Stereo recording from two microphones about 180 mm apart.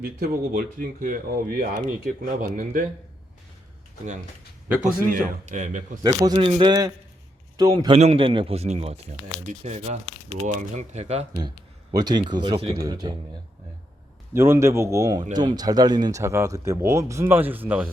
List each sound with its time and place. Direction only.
0.0 s speech: 50° right (ahead or behind)
4.8 s speech: 45° right (ahead or behind)
6.1 s a man's voice: 25° right (ahead or behind)
7.9 s speech: 35° right (ahead or behind)
11.3 s speech: 25° right (ahead or behind)
14.3 s speech: 15° right (ahead or behind)